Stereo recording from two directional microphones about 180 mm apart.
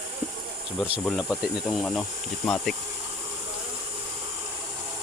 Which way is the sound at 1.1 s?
Centre (ahead or behind).